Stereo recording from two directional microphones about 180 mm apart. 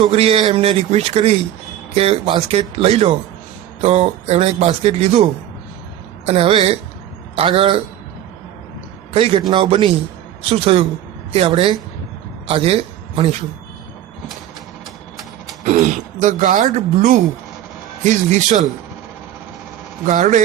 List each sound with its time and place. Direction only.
0.0 s speech: 35° right (ahead or behind)
6.2 s speech: 35° right (ahead or behind)
9.1 s a man's voice: 30° right (ahead or behind)
15.6 s speech: 40° right (ahead or behind)
20.1 s speech: 40° right (ahead or behind)